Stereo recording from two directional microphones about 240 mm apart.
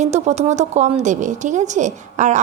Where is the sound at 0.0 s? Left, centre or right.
Right.